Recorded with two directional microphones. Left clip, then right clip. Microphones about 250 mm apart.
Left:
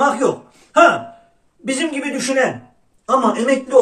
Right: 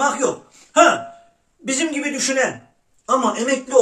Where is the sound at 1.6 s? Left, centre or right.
Centre.